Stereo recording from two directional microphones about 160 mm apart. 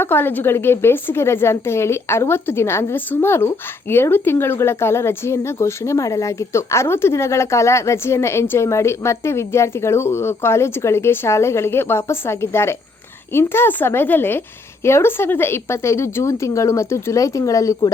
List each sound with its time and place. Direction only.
0.0 s a woman's voice: 15° left (ahead or behind)